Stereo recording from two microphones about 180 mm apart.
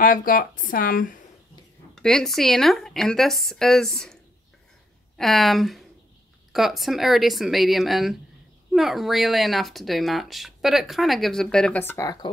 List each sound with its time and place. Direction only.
0.0 s speech: 50° left (ahead or behind)
2.0 s speech: 5° left (ahead or behind); by 12.3 s 20° left (ahead or behind)